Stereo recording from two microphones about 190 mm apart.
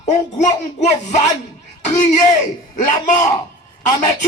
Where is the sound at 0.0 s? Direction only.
40° left (ahead or behind).